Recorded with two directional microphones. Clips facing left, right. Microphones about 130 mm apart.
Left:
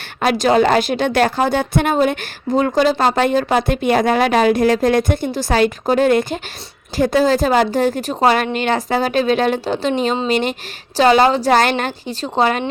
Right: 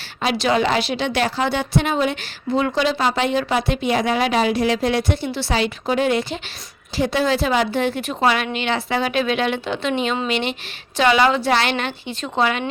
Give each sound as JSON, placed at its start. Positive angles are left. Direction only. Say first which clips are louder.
{"t": 0.2, "sound": "a woman's voice", "louder": "left 5 dB", "side_deg": 45}